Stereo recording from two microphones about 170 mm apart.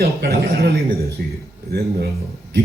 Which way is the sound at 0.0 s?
65° right (ahead or behind).